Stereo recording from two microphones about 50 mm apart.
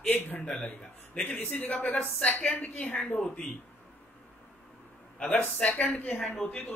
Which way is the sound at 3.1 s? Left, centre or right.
Centre.